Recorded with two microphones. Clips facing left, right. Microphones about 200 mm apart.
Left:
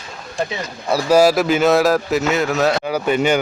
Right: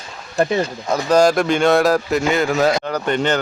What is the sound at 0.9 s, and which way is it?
Speech, 5° left (ahead or behind).